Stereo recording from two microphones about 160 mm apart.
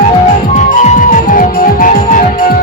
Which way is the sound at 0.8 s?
50° left (ahead or behind).